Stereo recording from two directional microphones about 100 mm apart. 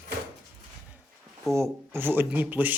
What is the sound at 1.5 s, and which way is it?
Speech, 25° right (ahead or behind).